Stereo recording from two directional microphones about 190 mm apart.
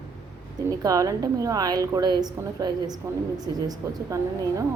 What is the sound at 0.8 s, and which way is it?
A woman's voice, 20° right (ahead or behind).